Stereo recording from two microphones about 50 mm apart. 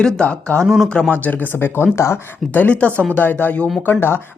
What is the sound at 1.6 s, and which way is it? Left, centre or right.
Speech, left.